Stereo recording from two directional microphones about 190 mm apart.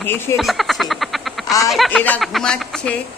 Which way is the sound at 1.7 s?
Centre (ahead or behind).